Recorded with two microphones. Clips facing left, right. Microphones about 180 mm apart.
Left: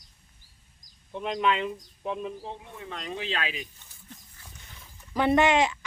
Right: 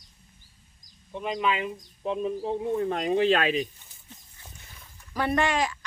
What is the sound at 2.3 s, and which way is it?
Speech, 40° right (ahead or behind).